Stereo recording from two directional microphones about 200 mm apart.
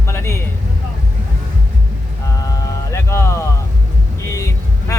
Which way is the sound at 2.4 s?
15° left (ahead or behind).